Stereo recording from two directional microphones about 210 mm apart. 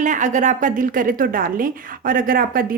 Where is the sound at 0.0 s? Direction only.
35° right (ahead or behind).